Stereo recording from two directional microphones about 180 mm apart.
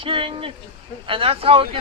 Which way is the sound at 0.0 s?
30° right (ahead or behind).